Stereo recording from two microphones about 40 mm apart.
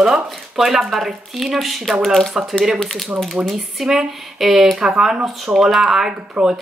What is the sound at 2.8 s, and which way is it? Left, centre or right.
Speech, centre.